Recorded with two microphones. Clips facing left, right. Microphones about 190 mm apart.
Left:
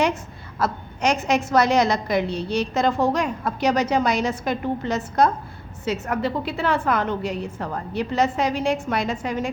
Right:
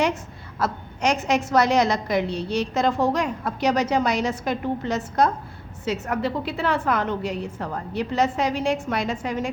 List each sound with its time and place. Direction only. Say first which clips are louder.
0.6 s a woman's voice: left 1 dB; 55° left (ahead or behind)